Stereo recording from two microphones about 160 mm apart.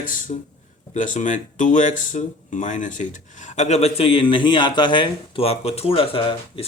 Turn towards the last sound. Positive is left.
turn(degrees=35)  # may be behind; listen again after turning